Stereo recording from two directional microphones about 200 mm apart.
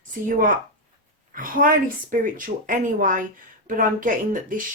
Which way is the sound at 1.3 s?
45° right (ahead or behind).